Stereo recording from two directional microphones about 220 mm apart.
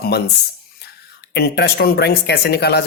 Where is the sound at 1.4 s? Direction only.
45° left (ahead or behind).